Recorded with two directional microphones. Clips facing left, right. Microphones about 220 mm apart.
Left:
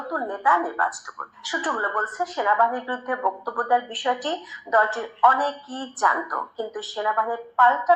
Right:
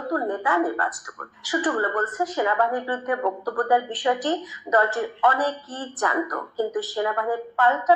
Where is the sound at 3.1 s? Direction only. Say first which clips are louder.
Right 3 dB; 30° right (ahead or behind).